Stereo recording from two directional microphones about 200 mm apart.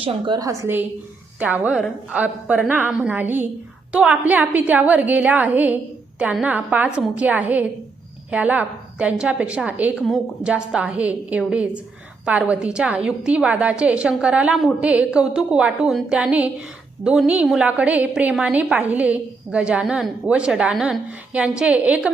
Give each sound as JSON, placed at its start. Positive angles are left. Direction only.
{"t": 0.0, "sound": "a woman's voice", "side_deg": -20}
{"t": 0.6, "sound": "a woman's voice", "side_deg": -10}